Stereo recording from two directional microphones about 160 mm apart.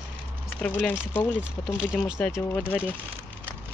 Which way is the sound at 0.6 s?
10° left (ahead or behind).